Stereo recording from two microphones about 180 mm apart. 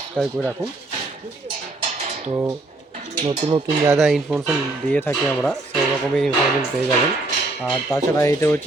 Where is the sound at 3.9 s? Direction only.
Centre (ahead or behind).